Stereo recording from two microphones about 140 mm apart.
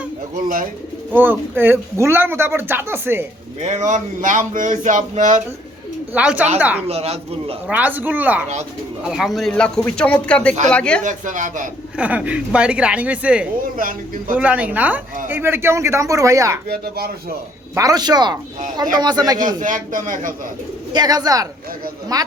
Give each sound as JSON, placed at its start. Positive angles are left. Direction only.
{"t": 0.4, "sound": "speech", "side_deg": -70}
{"t": 1.1, "sound": "speech", "side_deg": -15}
{"t": 3.6, "sound": "speech", "side_deg": -55}
{"t": 6.1, "sound": "speech", "side_deg": -10}
{"t": 6.8, "sound": "speech", "side_deg": -45}
{"t": 7.7, "sound": "a man's voice", "side_deg": -10}
{"t": 11.0, "sound": "speech", "side_deg": -65}
{"t": 11.9, "sound": "speech", "side_deg": -10}
{"t": 13.7, "sound": "speech", "side_deg": -80}
{"t": 14.3, "sound": "speech", "side_deg": -10}
{"t": 16.6, "sound": "speech", "side_deg": -90}
{"t": 17.7, "sound": "speech", "side_deg": -25}
{"t": 19.5, "sound": "a man's voice", "side_deg": -70}
{"t": 20.9, "sound": "speech", "side_deg": -30}